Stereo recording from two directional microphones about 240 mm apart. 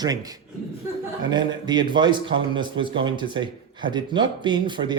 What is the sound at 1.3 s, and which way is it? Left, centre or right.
A man's voice, centre.